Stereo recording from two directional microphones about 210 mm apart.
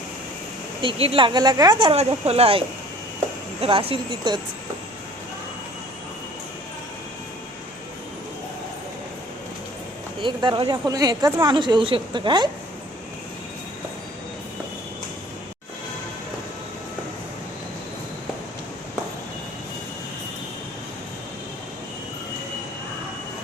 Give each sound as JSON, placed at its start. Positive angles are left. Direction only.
{"t": 0.8, "sound": "a woman's voice", "side_deg": -25}
{"t": 10.2, "sound": "a woman's voice", "side_deg": -20}